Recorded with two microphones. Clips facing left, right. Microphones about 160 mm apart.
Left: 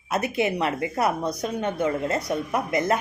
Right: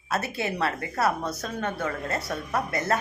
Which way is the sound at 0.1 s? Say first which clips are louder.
Left 5 dB; 20° left (ahead or behind).